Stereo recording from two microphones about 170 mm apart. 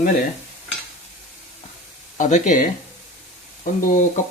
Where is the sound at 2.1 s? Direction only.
50° left (ahead or behind).